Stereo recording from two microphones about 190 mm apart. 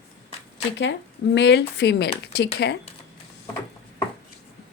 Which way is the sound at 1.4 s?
65° left (ahead or behind).